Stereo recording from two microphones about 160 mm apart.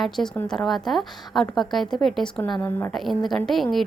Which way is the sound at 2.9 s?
Centre (ahead or behind).